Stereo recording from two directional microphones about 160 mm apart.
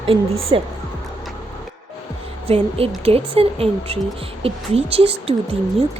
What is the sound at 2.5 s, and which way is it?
A woman's voice, 35° right (ahead or behind).